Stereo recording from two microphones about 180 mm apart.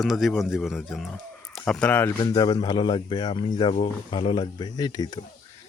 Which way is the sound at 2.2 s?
25° left (ahead or behind).